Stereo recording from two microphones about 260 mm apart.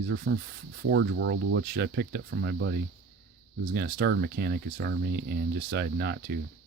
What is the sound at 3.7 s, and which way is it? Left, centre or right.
Speech, right.